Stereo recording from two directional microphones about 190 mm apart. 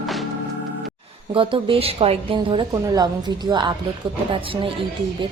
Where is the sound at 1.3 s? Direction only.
30° right (ahead or behind).